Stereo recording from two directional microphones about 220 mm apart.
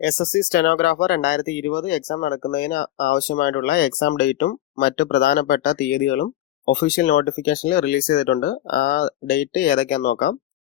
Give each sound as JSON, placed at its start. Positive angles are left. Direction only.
{"t": 0.0, "sound": "speech", "side_deg": 45}